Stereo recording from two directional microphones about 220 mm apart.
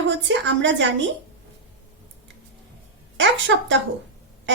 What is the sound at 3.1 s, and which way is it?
Speech, 55° right (ahead or behind).